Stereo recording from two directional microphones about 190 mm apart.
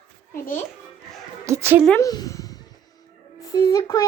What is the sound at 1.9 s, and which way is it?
A child's voice, 15° left (ahead or behind).